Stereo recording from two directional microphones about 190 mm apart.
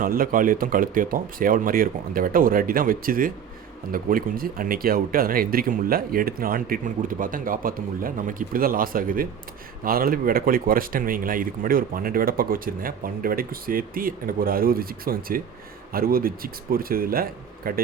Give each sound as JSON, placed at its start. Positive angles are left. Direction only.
{"t": 0.0, "sound": "speech", "side_deg": -50}